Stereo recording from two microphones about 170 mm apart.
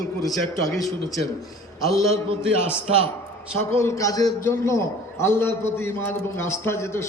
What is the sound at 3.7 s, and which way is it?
A man's voice, 15° left (ahead or behind).